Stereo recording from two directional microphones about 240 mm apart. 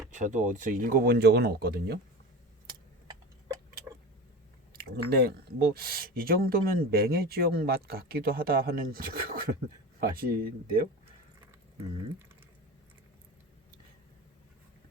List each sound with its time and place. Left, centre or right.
0.1 s speech: right
4.7 s speech: right